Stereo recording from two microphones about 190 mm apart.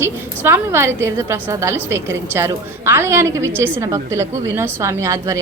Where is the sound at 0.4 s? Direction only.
10° right (ahead or behind).